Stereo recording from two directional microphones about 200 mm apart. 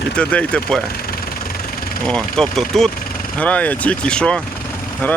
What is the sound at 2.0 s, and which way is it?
Speech, 5° left (ahead or behind).